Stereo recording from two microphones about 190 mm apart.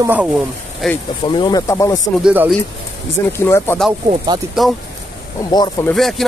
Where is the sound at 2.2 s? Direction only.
5° right (ahead or behind).